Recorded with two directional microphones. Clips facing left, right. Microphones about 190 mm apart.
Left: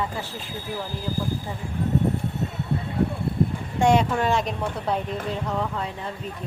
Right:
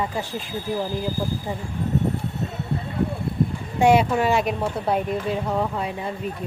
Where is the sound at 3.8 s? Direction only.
10° right (ahead or behind).